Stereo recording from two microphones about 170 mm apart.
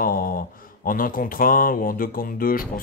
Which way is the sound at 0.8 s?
55° left (ahead or behind).